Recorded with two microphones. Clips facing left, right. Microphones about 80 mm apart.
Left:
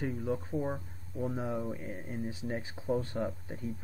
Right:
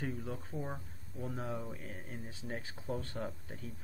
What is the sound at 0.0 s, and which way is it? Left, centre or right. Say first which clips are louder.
Speech: left 6 dB; centre.